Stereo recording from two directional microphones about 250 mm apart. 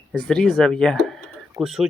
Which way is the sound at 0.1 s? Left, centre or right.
Centre.